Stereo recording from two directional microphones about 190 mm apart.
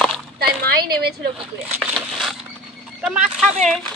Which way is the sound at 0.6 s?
55° right (ahead or behind).